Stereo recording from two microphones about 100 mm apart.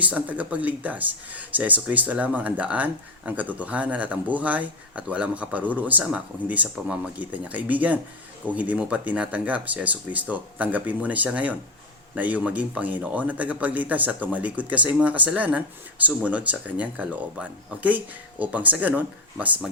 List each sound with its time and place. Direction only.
0.0 s speech: 15° right (ahead or behind)